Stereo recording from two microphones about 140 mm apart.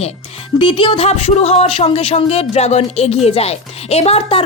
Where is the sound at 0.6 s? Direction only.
40° left (ahead or behind).